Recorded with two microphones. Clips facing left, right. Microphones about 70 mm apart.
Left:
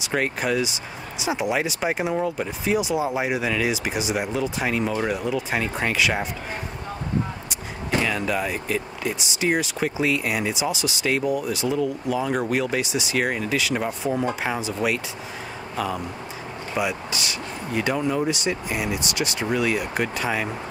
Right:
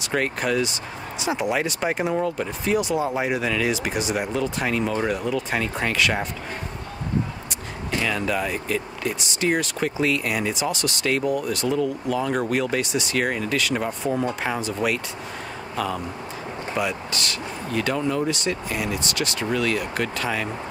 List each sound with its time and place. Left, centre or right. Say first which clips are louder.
0.0 s speech: even; centre
8.0 s speech: right 2 dB; centre